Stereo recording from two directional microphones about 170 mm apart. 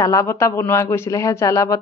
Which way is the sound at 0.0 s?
20° left (ahead or behind).